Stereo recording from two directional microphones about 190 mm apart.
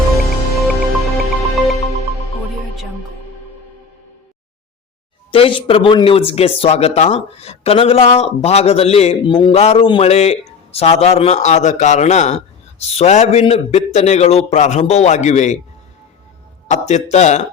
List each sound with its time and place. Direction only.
0.5 s music: centre (ahead or behind)
5.3 s speech: 25° left (ahead or behind)
16.6 s speech: 35° left (ahead or behind)